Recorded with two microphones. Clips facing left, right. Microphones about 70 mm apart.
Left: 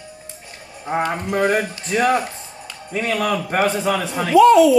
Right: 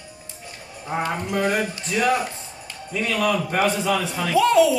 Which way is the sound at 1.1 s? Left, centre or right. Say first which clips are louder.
Left 3 dB; left.